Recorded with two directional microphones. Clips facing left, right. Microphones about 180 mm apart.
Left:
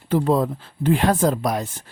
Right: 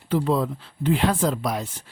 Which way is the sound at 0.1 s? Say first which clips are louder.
Left 3 dB; 45° left (ahead or behind).